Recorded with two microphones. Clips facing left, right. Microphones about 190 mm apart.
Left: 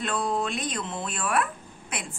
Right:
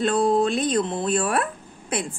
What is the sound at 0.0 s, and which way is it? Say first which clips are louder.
A woman's voice: right 8 dB; 35° right (ahead or behind).